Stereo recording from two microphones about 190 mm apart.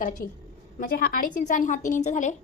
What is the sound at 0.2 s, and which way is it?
A woman's voice, 50° left (ahead or behind).